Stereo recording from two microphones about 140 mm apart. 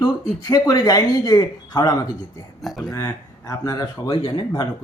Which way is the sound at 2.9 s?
20° left (ahead or behind).